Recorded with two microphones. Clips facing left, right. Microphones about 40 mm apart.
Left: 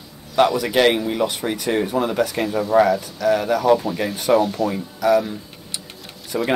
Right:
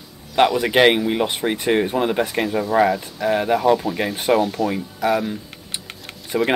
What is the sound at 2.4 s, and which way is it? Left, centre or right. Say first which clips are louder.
Speech: right 1 dB; centre.